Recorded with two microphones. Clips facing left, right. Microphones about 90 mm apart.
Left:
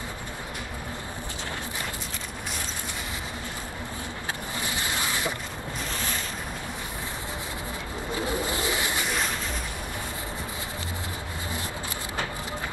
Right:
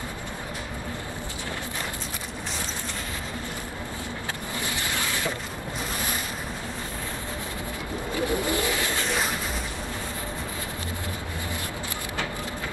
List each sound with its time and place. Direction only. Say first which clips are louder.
4.6 s vehicle: right 1 dB; 20° left (ahead or behind)
8.1 s vehicle: right 3 dB; 25° left (ahead or behind)